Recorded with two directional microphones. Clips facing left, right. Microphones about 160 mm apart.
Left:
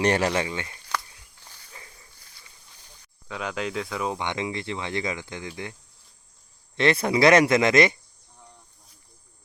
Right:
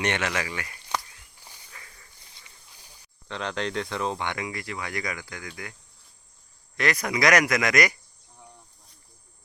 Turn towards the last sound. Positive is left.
turn(degrees=25)  # may be behind; listen again after turning